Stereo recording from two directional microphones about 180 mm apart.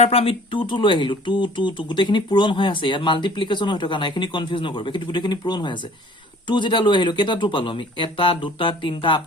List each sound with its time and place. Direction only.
0.0 s speech: 30° left (ahead or behind)